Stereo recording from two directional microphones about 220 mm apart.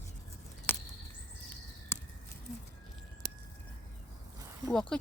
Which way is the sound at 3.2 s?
45° right (ahead or behind).